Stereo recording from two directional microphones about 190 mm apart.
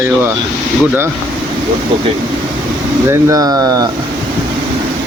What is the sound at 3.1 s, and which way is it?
Speech, 15° right (ahead or behind).